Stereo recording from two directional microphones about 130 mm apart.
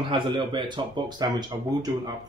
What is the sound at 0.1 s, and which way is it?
Speech, 40° right (ahead or behind).